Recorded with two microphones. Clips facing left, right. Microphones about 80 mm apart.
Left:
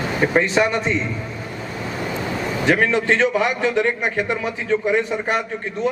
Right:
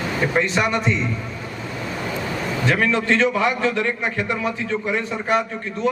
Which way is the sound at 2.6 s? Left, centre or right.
Left.